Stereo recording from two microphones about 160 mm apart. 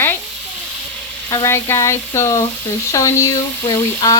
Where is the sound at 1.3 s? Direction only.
20° left (ahead or behind).